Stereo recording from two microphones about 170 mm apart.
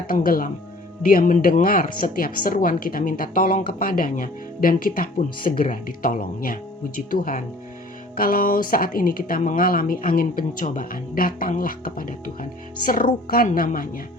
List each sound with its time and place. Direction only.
0.1 s a woman's voice: 55° left (ahead or behind)